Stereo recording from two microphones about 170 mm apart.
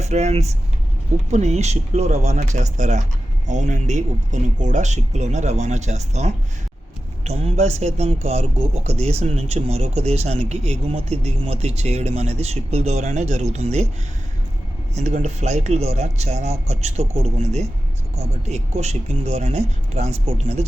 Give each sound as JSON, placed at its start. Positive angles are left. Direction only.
{"t": 0.0, "sound": "speech", "side_deg": -40}
{"t": 14.9, "sound": "speech", "side_deg": -40}